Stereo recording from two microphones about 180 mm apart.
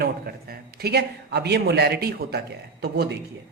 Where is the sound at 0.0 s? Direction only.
60° right (ahead or behind).